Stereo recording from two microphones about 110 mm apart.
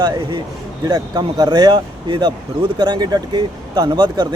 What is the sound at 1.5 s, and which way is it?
Speech, 50° right (ahead or behind).